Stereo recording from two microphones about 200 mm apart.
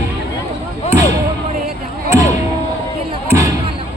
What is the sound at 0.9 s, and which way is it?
Basketball bounce, 15° right (ahead or behind).